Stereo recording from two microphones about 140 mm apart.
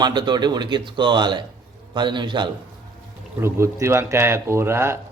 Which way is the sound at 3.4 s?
20° right (ahead or behind).